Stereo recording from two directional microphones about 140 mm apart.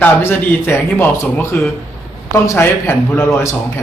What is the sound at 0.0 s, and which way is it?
A man's voice, 15° left (ahead or behind).